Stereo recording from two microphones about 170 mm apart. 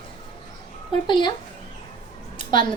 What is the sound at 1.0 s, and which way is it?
Speech, 25° left (ahead or behind).